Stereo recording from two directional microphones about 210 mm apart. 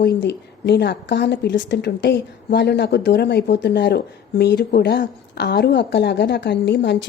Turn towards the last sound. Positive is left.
turn(degrees=55)  # may be behind; listen again after turning